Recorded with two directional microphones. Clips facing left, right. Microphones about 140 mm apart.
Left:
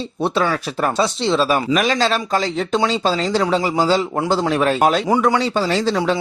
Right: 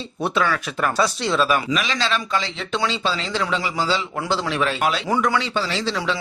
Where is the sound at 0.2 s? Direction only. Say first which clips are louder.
Left 3 dB; 35° left (ahead or behind).